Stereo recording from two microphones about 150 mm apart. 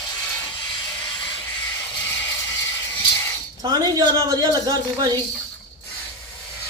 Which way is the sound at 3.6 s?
25° right (ahead or behind).